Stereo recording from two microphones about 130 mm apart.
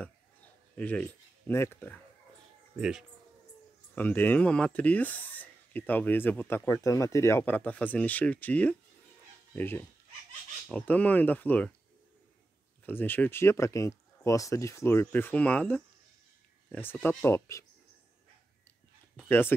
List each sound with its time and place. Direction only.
0.7 s speech: 10° left (ahead or behind)
2.8 s speech: 5° right (ahead or behind)
3.9 s speech: 15° left (ahead or behind)
12.8 s speech: 15° left (ahead or behind)
19.1 s speech: 15° left (ahead or behind)